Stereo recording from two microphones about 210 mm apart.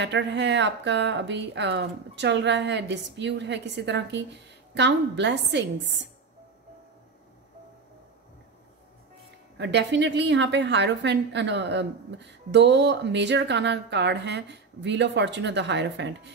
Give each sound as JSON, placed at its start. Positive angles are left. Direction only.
{"t": 0.0, "sound": "a woman's voice", "side_deg": -55}
{"t": 9.6, "sound": "a woman's voice", "side_deg": -55}